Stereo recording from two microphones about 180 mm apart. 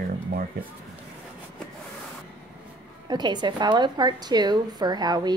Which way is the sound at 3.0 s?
25° right (ahead or behind).